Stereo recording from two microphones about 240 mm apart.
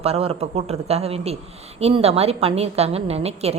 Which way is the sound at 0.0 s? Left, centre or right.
Right.